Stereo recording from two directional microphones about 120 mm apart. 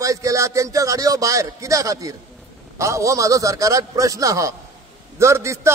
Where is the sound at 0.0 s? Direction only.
25° right (ahead or behind).